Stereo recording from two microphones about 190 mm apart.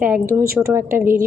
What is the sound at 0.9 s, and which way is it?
Speech, 45° right (ahead or behind).